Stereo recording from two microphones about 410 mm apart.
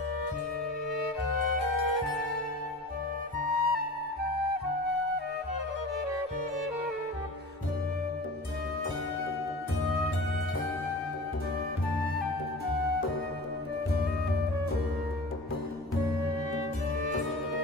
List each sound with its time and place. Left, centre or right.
3.3 s flute: right